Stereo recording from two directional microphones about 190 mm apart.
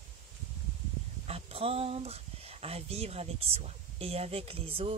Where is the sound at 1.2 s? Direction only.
30° right (ahead or behind).